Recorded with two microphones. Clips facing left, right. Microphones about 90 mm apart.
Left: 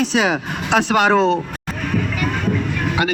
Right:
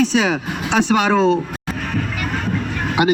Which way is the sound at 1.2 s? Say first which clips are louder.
Right 1 dB; 10° right (ahead or behind).